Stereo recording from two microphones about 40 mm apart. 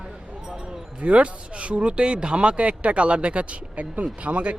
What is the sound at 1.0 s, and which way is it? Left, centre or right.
Speech, right.